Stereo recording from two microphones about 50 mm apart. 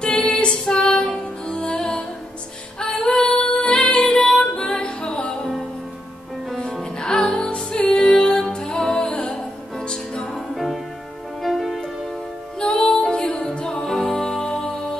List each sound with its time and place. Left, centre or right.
0.0 s music: centre
3.0 s female singing: centre
3.3 s music: left
6.8 s music: centre
10.2 s music: centre
12.5 s music: centre